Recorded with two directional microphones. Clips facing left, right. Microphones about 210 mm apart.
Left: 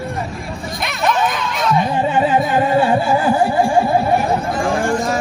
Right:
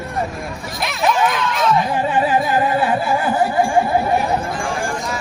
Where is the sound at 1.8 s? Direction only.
25° left (ahead or behind).